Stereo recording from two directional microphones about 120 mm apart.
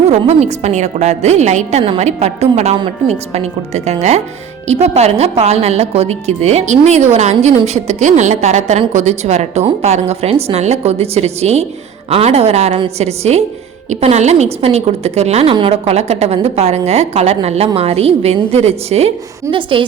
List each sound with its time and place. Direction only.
0.0 s a woman's voice: 65° right (ahead or behind); by 19.8 s 45° right (ahead or behind)